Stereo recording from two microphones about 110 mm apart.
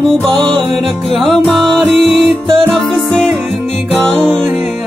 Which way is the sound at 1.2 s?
Centre (ahead or behind).